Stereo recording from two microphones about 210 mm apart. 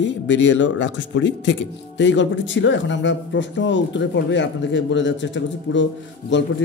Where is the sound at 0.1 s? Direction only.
60° left (ahead or behind).